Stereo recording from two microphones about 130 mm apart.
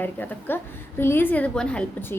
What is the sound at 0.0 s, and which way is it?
A woman's voice, 15° left (ahead or behind).